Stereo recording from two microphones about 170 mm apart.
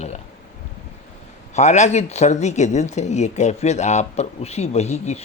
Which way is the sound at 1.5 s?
45° left (ahead or behind).